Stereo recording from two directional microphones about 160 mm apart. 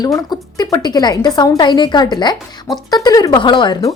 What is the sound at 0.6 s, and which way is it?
A woman's voice, 25° left (ahead or behind).